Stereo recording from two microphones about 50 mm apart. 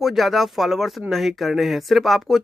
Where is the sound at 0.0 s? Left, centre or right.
Centre.